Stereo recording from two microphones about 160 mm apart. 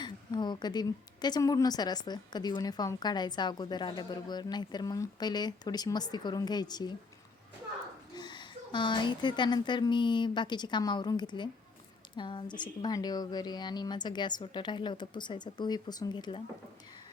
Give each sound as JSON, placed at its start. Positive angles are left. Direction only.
{"t": 0.0, "sound": "a woman's voice", "side_deg": 25}
{"t": 8.1, "sound": "a woman's voice", "side_deg": 25}